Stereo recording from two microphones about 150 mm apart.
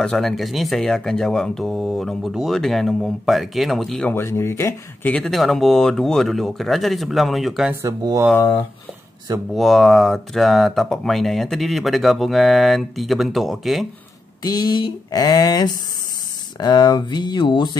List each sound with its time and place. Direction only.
0.0 s speech: centre (ahead or behind)
4.1 s speech: 15° left (ahead or behind); by 7.7 s centre (ahead or behind)
7.8 s speech: 20° right (ahead or behind)
9.5 s speech: centre (ahead or behind)
14.4 s a sound: 25° left (ahead or behind)